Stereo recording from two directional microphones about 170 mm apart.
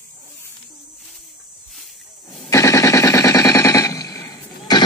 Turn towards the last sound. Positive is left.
turn(degrees=20)  # may be behind; listen again after turning